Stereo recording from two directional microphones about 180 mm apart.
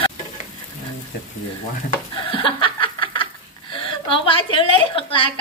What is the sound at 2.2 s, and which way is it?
Chuckle, 30° left (ahead or behind).